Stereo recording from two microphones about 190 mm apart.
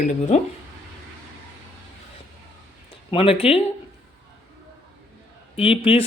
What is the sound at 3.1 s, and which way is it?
Speech, 30° left (ahead or behind).